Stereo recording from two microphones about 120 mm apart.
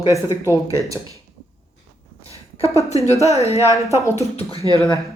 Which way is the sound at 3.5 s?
25° right (ahead or behind).